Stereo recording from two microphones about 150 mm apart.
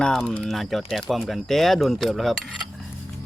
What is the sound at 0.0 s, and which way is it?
Speech, centre (ahead or behind).